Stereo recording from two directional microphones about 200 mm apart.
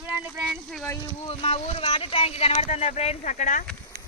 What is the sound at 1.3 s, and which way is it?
Speech, 30° left (ahead or behind).